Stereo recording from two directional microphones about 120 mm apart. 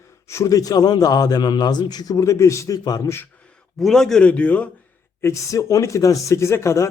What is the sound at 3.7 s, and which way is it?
Speech, 5° left (ahead or behind).